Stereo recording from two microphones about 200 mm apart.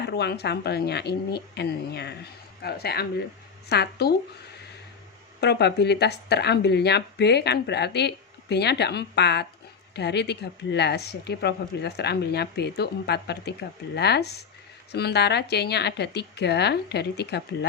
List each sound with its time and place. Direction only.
0.0 s speech: 55° left (ahead or behind)
5.4 s speech: 55° left (ahead or behind)